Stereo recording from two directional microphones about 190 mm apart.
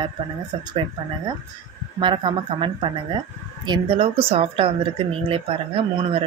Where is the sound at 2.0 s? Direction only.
25° right (ahead or behind).